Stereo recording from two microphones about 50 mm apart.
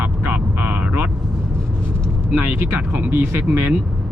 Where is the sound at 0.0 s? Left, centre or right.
Right.